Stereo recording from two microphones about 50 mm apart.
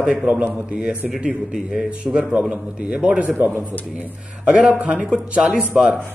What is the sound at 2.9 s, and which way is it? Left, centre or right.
Speech, right.